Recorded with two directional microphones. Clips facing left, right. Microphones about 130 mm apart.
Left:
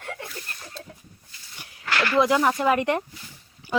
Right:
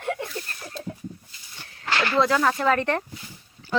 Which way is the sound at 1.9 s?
25° right (ahead or behind).